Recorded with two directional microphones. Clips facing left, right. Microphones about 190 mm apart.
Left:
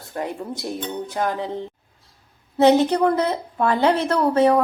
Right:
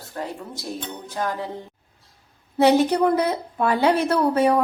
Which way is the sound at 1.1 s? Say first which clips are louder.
Left 2 dB; 20° left (ahead or behind).